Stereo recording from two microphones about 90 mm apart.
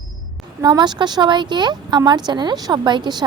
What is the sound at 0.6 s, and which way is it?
A woman's voice, 50° right (ahead or behind).